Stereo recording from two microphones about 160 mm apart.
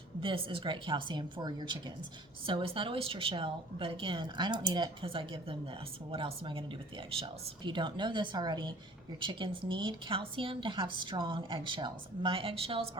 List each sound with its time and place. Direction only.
0.2 s speech: 35° right (ahead or behind)